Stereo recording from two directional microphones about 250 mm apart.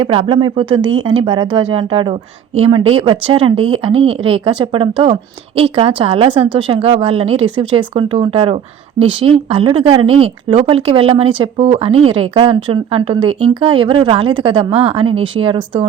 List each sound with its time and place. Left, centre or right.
0.0 s speech: right